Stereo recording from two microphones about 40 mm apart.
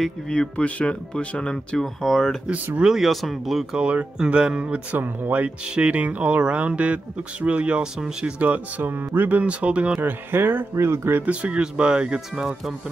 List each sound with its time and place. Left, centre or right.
0.3 s speech: left
1.8 s speech: centre
2.8 s speech: centre
3.1 s speech: centre
3.7 s speech: right
4.9 s speech: right
7.8 s speech: centre
8.4 s speech: right
9.4 s speech: right
10.0 s speech: right
10.8 s speech: right
11.2 s speech: right
11.6 s speech: right